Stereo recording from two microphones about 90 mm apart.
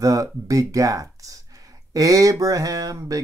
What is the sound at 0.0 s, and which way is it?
Speech, 40° right (ahead or behind).